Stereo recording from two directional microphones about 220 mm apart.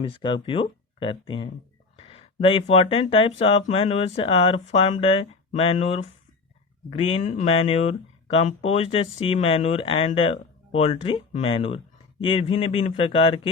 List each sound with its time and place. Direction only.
0.0 s speech: 20° left (ahead or behind)